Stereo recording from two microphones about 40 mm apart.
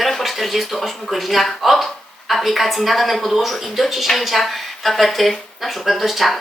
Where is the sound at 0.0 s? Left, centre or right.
Centre.